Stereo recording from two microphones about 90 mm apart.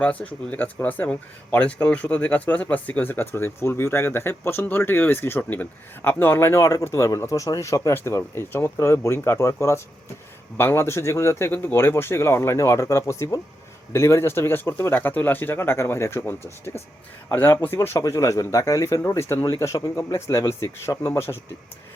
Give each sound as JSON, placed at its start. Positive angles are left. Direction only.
{"t": 0.0, "sound": "speech", "side_deg": 15}